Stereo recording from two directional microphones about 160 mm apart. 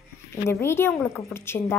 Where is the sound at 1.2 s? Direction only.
15° left (ahead or behind).